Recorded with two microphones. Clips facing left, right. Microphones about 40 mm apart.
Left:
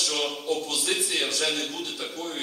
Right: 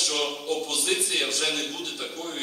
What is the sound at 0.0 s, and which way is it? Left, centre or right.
A man's voice, centre.